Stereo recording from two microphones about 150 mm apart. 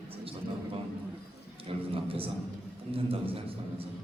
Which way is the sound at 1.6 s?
40° right (ahead or behind).